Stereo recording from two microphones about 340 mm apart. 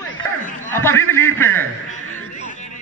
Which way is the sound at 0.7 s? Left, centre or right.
Centre.